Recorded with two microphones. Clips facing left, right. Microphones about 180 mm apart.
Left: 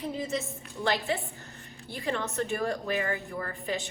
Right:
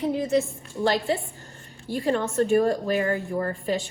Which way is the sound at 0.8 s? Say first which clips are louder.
Right 6 dB; 35° right (ahead or behind).